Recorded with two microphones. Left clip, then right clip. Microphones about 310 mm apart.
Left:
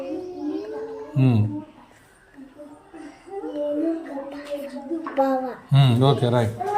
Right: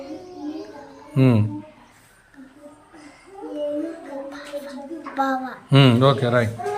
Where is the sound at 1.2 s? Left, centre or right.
Right.